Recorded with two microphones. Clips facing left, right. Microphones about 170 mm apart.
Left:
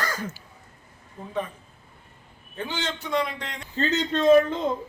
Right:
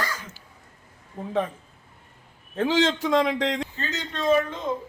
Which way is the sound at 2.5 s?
90° right.